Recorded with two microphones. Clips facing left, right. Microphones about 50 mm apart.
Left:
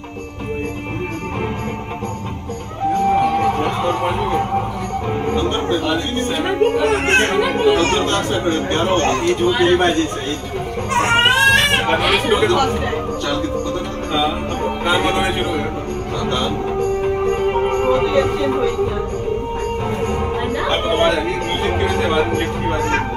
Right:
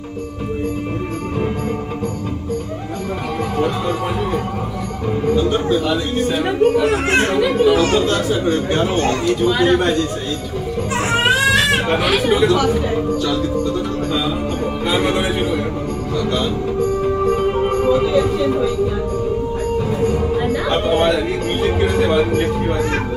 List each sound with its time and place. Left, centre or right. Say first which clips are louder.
2.9 s music: left 11 dB; left
5.2 s speech: right 4 dB; left
10.9 s bleat: left 2 dB; left
14.9 s speech: left 1 dB; left
16.2 s music: right 1 dB; left
19.8 s music: right 2 dB; left